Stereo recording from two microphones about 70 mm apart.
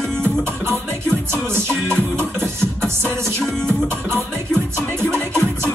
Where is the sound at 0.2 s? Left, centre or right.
Right.